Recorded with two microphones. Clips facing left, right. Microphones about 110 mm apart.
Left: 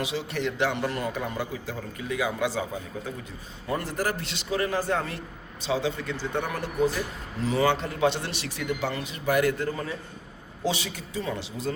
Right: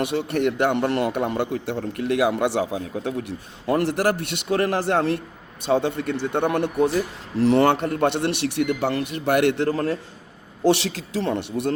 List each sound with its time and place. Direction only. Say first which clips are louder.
0.0 s a man's voice: right 7 dB; 60° right (ahead or behind)
5.6 s a man's voice: right 6 dB; 55° right (ahead or behind)